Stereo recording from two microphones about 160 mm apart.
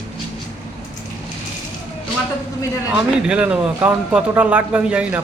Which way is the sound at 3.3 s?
5° right (ahead or behind).